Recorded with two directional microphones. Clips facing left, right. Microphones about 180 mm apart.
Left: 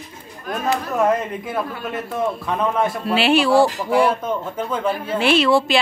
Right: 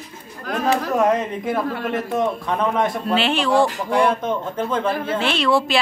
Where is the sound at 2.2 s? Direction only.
5° left (ahead or behind).